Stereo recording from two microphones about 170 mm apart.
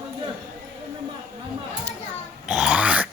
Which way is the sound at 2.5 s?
5° right (ahead or behind).